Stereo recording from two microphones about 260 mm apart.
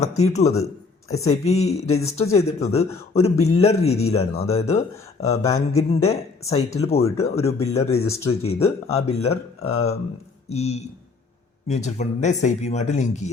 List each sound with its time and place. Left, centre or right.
0.0 s speech: left